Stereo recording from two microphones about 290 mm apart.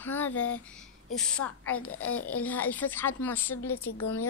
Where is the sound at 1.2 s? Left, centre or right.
Centre.